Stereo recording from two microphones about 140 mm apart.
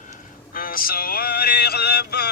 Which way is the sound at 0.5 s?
90° left.